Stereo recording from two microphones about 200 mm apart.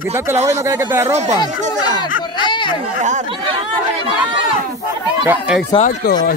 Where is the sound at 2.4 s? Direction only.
25° left (ahead or behind).